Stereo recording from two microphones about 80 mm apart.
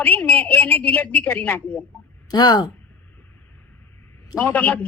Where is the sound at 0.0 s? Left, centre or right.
Centre.